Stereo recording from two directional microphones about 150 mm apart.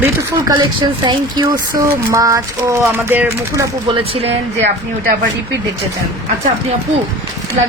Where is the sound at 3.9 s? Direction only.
40° right (ahead or behind).